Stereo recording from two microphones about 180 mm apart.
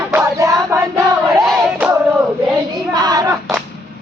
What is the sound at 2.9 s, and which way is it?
Hands, 20° right (ahead or behind).